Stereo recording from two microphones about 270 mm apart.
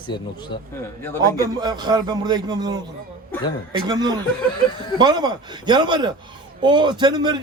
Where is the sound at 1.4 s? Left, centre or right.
Centre.